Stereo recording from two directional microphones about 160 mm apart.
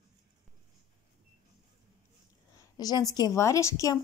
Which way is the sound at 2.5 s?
25° left (ahead or behind).